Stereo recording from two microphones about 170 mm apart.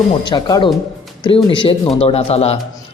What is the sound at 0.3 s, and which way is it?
Speech, 25° left (ahead or behind).